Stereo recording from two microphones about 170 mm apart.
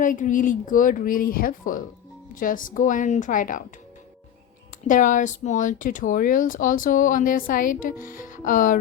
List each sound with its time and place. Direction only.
0.0 s speech: 50° left (ahead or behind)
4.9 s speech: 50° left (ahead or behind)